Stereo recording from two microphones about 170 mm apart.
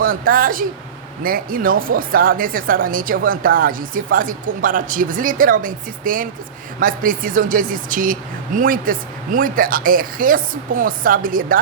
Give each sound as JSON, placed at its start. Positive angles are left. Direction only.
{"t": 0.0, "sound": "speech", "side_deg": -55}